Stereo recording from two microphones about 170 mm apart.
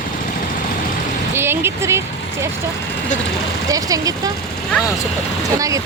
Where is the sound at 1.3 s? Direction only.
15° right (ahead or behind).